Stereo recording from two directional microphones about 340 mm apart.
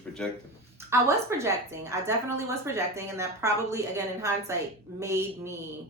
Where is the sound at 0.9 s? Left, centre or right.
Centre.